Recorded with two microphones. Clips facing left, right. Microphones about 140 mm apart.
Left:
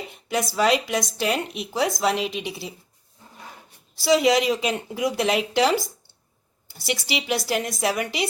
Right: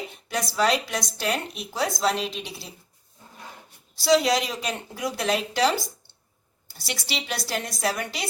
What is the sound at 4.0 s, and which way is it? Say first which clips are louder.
Speech: left 2 dB; 15° left (ahead or behind).